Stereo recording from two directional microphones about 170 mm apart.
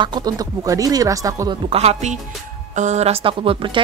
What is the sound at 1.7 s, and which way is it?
Speech, 40° right (ahead or behind).